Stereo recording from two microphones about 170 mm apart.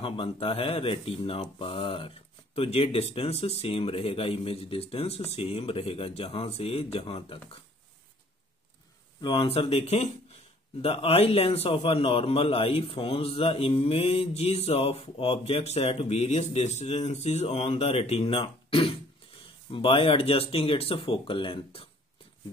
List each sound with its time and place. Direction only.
0.0 s a man's voice: 30° left (ahead or behind)
9.2 s a man's voice: 30° left (ahead or behind)